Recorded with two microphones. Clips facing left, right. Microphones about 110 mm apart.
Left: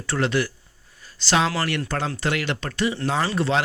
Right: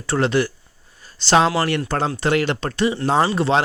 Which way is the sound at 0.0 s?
25° right (ahead or behind).